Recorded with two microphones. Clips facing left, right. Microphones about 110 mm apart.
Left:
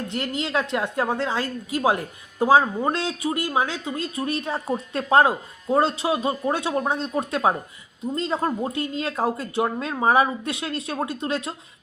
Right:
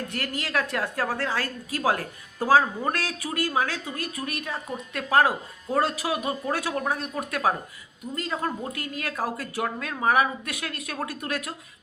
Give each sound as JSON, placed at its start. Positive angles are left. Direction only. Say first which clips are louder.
{"t": 0.1, "sound": "a woman's voice", "louder": "left 6 dB", "side_deg": 20}